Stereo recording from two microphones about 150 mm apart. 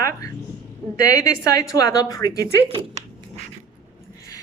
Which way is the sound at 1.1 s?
20° left (ahead or behind).